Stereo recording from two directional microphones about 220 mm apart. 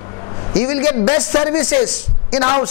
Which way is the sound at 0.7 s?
20° left (ahead or behind).